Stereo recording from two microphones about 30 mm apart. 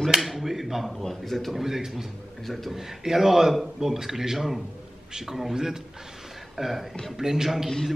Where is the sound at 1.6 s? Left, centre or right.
Centre.